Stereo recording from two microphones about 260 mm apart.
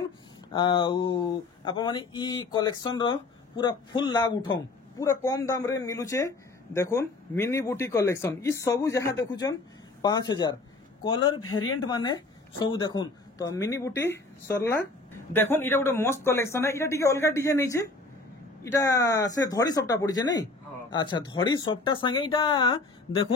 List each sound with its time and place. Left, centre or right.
0.5 s speech: centre
11.4 s speech: left
11.8 s speech: centre